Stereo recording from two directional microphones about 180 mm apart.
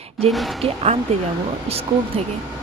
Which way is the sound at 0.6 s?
35° right (ahead or behind).